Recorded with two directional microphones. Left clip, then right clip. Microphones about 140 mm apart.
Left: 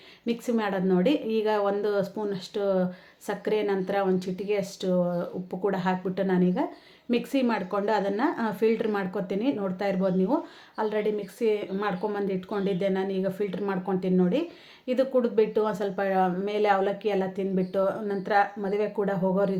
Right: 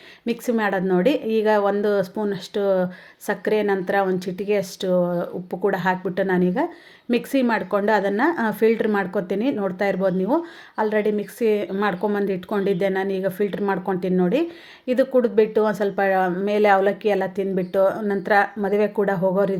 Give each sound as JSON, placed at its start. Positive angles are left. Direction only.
{"t": 0.3, "sound": "a woman's voice", "side_deg": -40}